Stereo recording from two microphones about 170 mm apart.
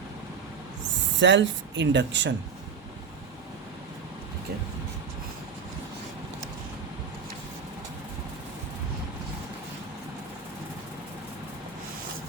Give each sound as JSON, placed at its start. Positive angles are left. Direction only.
{"t": 1.2, "sound": "speech", "side_deg": -90}